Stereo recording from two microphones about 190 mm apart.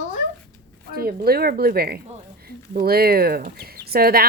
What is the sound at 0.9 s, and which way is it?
Speech, 55° right (ahead or behind).